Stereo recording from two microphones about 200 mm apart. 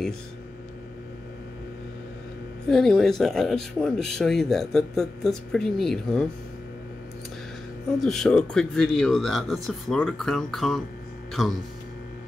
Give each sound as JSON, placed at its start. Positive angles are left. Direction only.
{"t": 2.7, "sound": "speech", "side_deg": 0}
{"t": 8.0, "sound": "speech", "side_deg": 0}